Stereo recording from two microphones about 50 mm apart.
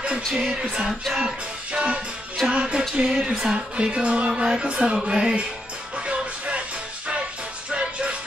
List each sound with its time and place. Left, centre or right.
0.4 s music: centre
7.7 s music: right